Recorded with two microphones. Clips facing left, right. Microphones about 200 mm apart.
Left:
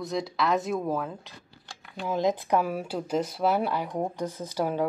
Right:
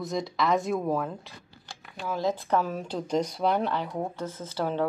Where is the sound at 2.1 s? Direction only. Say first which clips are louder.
Left 2 dB; 15° left (ahead or behind).